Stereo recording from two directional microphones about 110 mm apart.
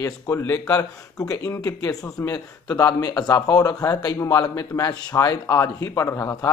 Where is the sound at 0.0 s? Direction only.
25° left (ahead or behind).